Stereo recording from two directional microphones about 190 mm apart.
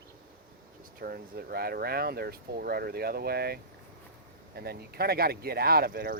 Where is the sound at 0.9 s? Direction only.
50° right (ahead or behind).